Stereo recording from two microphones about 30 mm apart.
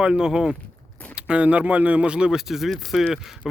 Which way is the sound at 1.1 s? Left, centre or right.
Right.